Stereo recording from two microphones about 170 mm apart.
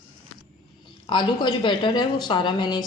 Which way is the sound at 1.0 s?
30° left (ahead or behind).